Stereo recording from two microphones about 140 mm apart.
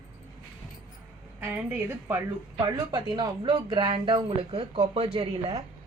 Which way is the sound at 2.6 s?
30° right (ahead or behind).